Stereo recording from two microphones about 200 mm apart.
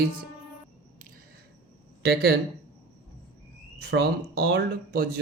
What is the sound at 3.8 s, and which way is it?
Speech, 55° right (ahead or behind).